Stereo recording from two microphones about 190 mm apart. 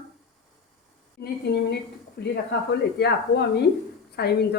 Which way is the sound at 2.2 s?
60° left (ahead or behind).